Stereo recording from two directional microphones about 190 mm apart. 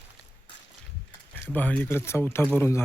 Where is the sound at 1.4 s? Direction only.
10° left (ahead or behind).